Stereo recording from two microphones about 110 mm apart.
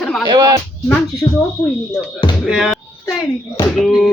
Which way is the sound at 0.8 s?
15° left (ahead or behind).